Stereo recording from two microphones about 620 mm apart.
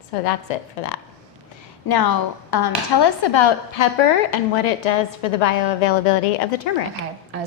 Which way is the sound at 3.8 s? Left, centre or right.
Left.